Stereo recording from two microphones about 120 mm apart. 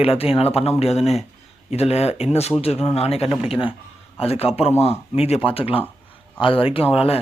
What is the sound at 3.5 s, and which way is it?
Speech, 45° left (ahead or behind).